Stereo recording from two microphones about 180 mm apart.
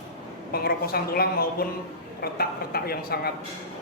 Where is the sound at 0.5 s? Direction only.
60° left (ahead or behind).